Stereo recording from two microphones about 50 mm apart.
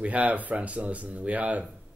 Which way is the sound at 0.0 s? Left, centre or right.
Right.